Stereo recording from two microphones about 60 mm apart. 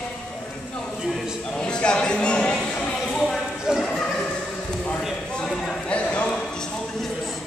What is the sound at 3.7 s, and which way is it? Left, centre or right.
Clip-clop, centre.